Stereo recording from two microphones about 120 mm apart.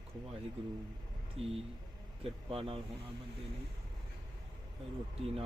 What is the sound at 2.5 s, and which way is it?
Speech, 50° right (ahead or behind).